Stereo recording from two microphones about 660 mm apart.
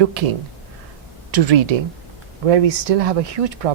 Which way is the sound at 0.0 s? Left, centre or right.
Right.